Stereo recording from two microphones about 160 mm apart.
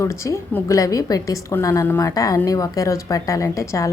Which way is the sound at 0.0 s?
20° left (ahead or behind).